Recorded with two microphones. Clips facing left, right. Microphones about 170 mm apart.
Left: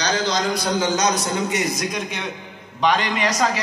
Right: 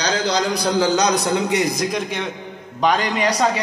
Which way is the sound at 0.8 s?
65° right (ahead or behind).